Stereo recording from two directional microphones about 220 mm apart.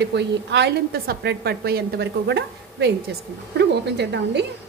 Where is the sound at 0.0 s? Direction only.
50° right (ahead or behind).